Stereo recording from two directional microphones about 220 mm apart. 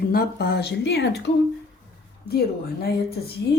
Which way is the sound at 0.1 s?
45° left (ahead or behind).